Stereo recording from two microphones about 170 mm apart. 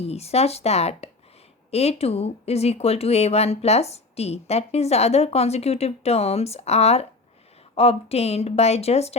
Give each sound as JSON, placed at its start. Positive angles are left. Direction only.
{"t": 0.1, "sound": "speech", "side_deg": 40}